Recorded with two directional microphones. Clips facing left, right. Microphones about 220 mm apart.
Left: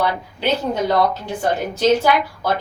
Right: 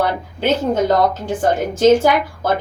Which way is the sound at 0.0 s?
50° right (ahead or behind).